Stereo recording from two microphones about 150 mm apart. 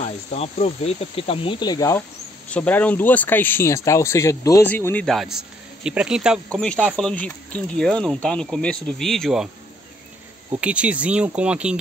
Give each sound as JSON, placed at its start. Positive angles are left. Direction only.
{"t": 0.0, "sound": "speech", "side_deg": 50}
{"t": 2.5, "sound": "speech", "side_deg": 10}
{"t": 6.5, "sound": "speech", "side_deg": 5}
{"t": 10.5, "sound": "speech", "side_deg": -10}